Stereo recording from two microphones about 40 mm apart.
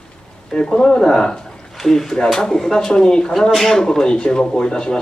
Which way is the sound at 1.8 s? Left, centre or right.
Centre.